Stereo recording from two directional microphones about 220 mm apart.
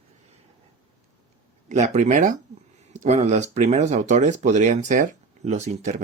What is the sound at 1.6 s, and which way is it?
Speech, 30° right (ahead or behind).